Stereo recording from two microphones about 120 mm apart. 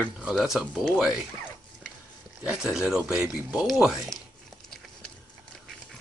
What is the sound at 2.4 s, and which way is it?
Speech, 5° right (ahead or behind).